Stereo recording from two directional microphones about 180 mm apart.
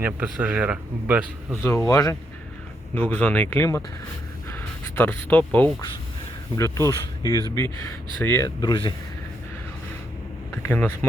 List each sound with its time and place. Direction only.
0.0 s speech: 10° right (ahead or behind)
1.6 s speech: 15° left (ahead or behind)
4.4 s a sound: 10° left (ahead or behind)
6.6 s speech: 15° left (ahead or behind)
10.5 s speech: 10° left (ahead or behind)